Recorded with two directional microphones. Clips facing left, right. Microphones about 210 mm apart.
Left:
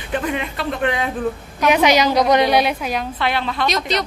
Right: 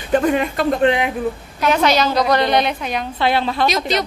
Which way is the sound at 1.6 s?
15° left (ahead or behind).